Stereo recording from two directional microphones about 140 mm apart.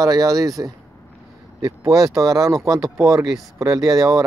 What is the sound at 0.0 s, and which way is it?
Speech, 25° right (ahead or behind).